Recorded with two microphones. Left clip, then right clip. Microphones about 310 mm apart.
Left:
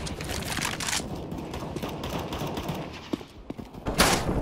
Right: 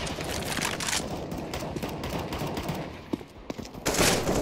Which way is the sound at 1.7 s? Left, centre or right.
Centre.